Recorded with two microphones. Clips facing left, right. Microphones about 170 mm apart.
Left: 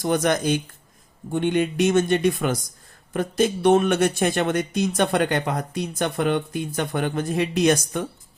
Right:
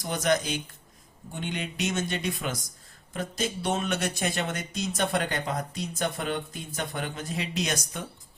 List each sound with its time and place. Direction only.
0.0 s speech: 55° left (ahead or behind)